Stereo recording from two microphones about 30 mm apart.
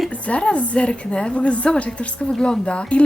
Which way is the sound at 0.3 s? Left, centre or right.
Left.